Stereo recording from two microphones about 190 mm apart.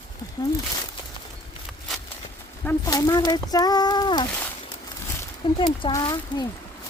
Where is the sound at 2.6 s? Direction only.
15° left (ahead or behind).